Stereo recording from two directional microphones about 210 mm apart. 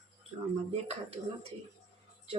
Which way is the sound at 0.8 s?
30° right (ahead or behind).